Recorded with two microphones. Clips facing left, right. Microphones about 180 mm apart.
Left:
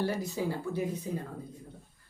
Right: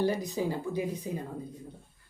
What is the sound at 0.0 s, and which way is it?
Speech, 15° right (ahead or behind).